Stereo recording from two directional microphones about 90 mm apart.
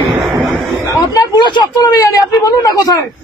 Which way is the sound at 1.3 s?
60° left (ahead or behind).